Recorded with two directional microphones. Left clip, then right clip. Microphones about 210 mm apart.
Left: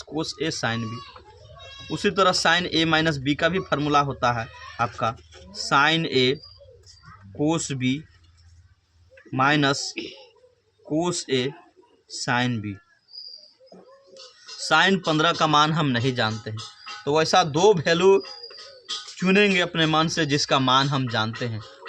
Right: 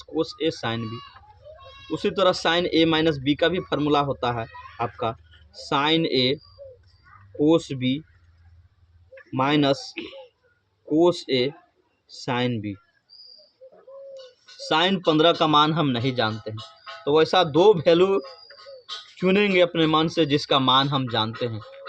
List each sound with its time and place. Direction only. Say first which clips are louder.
0.1 s speech: right 3 dB; 50° left (ahead or behind)
2.0 s speech: left 1 dB; 50° left (ahead or behind)
7.4 s speech: right 4 dB; 50° left (ahead or behind)
9.3 s speech: left 1 dB; 50° left (ahead or behind)
9.9 s speech: left 1 dB; 5° left (ahead or behind)
10.9 s speech: right 4 dB; 45° left (ahead or behind)
14.6 s speech: left 2 dB; 50° left (ahead or behind)